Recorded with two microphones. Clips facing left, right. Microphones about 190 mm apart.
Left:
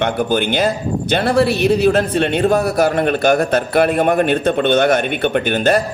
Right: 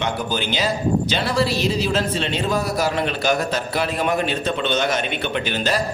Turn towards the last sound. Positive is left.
turn(degrees=55)  # may be behind; listen again after turning